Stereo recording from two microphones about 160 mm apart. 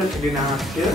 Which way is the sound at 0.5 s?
Centre (ahead or behind).